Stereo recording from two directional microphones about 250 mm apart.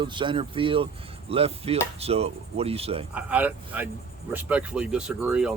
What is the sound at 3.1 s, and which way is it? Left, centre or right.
Speech, centre.